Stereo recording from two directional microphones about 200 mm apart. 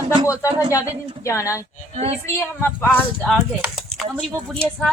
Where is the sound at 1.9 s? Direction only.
35° right (ahead or behind).